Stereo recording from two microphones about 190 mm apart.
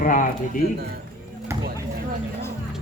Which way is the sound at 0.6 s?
55° right (ahead or behind).